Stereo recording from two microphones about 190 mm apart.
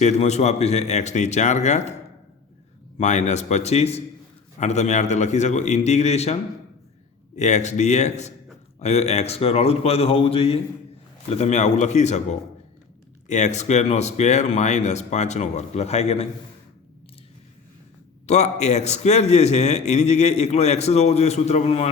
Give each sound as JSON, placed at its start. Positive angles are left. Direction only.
{"t": 0.0, "sound": "a man's voice", "side_deg": 35}
{"t": 3.0, "sound": "a man's voice", "side_deg": 40}
{"t": 7.3, "sound": "a man's voice", "side_deg": 40}
{"t": 18.3, "sound": "a man's voice", "side_deg": 35}